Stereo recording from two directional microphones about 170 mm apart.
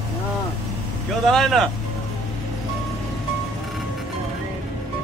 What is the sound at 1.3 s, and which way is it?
Speech, 5° left (ahead or behind).